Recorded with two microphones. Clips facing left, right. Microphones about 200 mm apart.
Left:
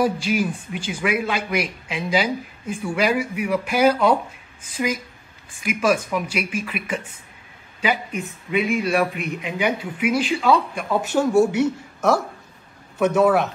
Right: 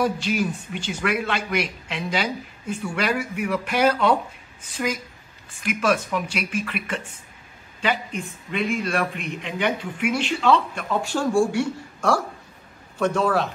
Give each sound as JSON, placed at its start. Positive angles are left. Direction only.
{"t": 0.0, "sound": "speech", "side_deg": 5}
{"t": 11.3, "sound": "a woman's voice", "side_deg": 20}